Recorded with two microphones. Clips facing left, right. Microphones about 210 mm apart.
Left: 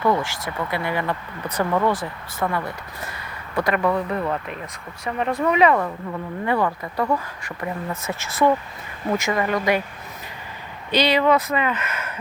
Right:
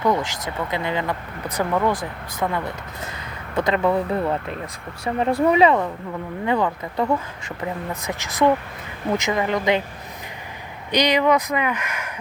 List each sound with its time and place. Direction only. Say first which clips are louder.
0.0 s speech: even; 15° right (ahead or behind)
6.4 s speech: right 1 dB; 15° right (ahead or behind)
10.9 s speech: even; 15° right (ahead or behind)